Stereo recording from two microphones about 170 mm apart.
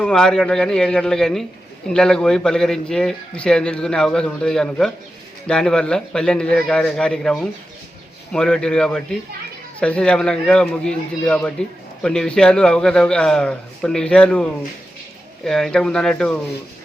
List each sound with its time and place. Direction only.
0.0 s a man's voice: 5° left (ahead or behind)